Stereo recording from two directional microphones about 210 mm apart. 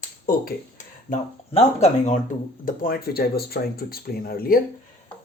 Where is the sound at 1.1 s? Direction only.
30° left (ahead or behind).